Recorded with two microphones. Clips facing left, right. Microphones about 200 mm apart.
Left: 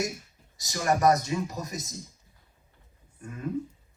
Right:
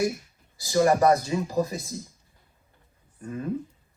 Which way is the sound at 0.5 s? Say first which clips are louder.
Right 7 dB; 30° right (ahead or behind).